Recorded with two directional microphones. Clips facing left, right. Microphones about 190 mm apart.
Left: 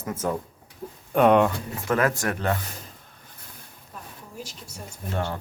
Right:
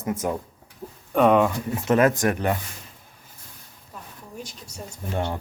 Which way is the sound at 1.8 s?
20° right (ahead or behind).